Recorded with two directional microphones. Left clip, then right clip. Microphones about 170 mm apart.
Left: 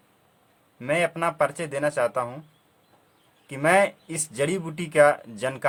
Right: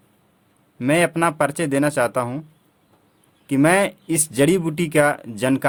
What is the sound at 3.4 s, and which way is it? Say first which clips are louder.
Speech: right 3 dB; 60° right (ahead or behind).